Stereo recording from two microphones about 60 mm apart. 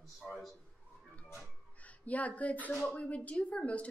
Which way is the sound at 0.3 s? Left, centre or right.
Centre.